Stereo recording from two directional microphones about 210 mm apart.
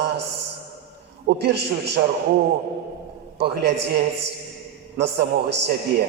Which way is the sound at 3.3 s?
50° right (ahead or behind).